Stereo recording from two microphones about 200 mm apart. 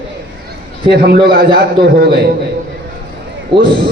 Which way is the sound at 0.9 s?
55° right (ahead or behind).